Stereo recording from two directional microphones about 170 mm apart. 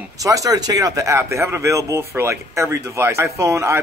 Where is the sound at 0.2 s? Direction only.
20° right (ahead or behind).